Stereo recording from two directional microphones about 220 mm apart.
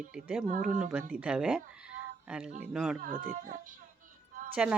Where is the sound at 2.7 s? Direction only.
5° right (ahead or behind).